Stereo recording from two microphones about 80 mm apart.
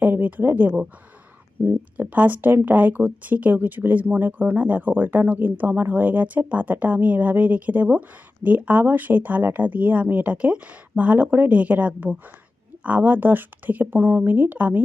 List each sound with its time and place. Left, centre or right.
0.0 s speech: right